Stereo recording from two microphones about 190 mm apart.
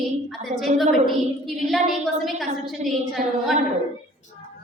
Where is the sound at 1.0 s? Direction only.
Centre (ahead or behind).